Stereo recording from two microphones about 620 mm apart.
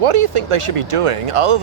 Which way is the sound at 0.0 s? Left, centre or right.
Right.